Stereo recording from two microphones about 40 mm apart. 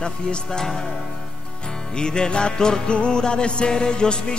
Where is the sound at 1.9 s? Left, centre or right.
Left.